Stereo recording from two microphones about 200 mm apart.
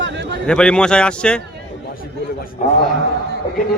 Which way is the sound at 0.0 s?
60° right (ahead or behind).